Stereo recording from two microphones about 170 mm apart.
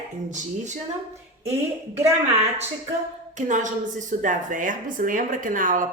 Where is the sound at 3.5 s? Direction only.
45° right (ahead or behind).